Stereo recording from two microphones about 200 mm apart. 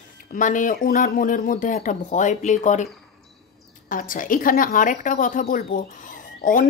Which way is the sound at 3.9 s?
40° left (ahead or behind).